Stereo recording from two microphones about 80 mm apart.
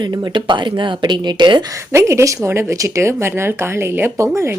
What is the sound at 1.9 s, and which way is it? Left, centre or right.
A woman's voice, right.